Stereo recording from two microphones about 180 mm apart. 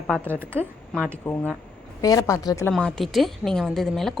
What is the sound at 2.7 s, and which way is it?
A woman's voice, 5° left (ahead or behind).